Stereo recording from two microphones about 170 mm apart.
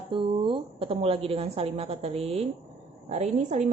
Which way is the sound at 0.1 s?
30° right (ahead or behind).